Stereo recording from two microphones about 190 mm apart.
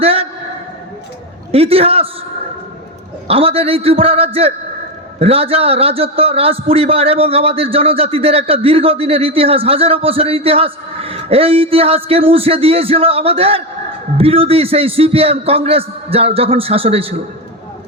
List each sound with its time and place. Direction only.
0.0 s a sound: 30° right (ahead or behind)
1.5 s a man's voice: 30° right (ahead or behind)
3.2 s a man's voice: 30° right (ahead or behind)